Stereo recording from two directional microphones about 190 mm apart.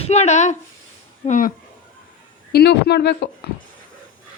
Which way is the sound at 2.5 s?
60° left (ahead or behind).